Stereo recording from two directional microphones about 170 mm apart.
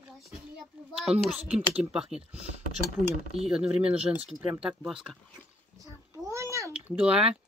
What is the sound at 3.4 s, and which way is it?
Speech, 5° right (ahead or behind).